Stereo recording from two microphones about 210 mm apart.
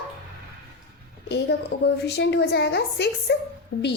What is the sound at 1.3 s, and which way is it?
A woman's voice, 55° left (ahead or behind).